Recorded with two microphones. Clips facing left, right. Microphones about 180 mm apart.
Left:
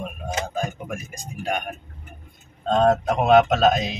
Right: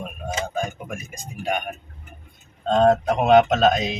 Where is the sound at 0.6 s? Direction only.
Centre (ahead or behind).